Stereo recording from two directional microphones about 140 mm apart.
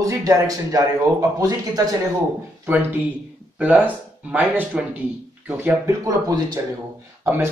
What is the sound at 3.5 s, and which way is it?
Speech, 10° right (ahead or behind).